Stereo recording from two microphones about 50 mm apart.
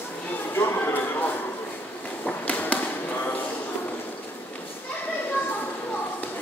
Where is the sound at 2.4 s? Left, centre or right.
Left.